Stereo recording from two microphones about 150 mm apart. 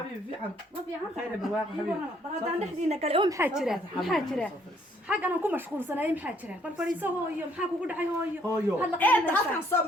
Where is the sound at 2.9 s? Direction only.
40° right (ahead or behind).